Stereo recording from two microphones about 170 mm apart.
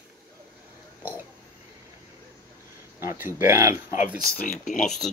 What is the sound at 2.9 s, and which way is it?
Speech, 15° right (ahead or behind).